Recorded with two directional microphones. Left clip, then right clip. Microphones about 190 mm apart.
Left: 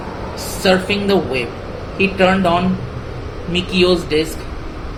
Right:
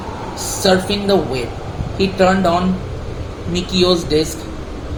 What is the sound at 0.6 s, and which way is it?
A man's voice, 20° right (ahead or behind).